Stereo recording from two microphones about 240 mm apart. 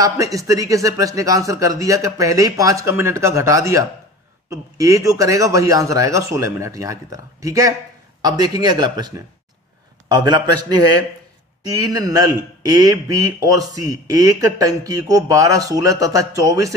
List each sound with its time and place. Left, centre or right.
0.0 s a man's voice: centre